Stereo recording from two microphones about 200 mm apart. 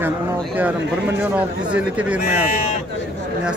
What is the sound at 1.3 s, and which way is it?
Speech, 5° right (ahead or behind).